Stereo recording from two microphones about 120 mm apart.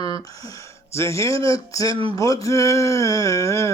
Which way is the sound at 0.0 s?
35° left (ahead or behind).